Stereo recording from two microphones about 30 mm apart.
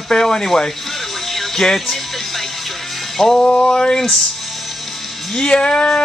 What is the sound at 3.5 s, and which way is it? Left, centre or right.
Speech, left.